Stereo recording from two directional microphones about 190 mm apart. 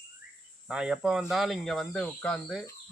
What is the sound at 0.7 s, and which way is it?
Speech, 5° right (ahead or behind).